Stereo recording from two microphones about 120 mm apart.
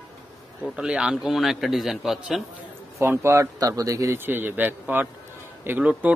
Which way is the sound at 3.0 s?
20° right (ahead or behind).